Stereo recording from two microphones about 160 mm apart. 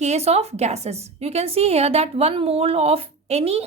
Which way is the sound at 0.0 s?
45° right (ahead or behind).